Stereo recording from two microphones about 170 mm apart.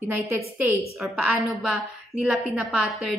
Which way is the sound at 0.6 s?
15° right (ahead or behind).